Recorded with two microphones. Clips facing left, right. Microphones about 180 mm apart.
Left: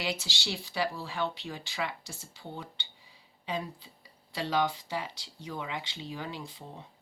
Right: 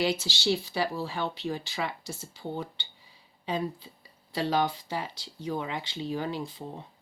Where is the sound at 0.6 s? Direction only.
35° right (ahead or behind).